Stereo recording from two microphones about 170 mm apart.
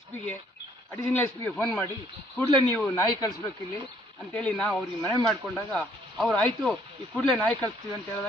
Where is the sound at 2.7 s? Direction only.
10° left (ahead or behind).